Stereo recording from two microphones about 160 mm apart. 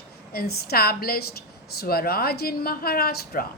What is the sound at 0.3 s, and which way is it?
A woman's voice, 80° left.